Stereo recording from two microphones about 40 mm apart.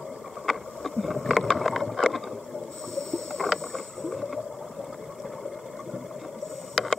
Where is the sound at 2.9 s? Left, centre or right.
Centre.